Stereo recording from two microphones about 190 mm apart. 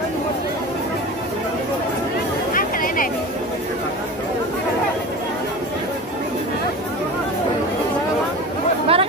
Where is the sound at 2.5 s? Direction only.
45° left (ahead or behind).